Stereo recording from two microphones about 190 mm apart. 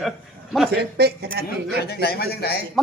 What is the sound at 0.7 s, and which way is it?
Speech, 55° right (ahead or behind).